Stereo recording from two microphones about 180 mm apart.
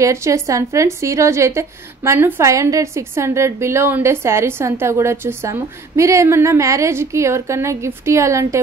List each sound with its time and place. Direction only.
0.0 s a woman's voice: 15° right (ahead or behind)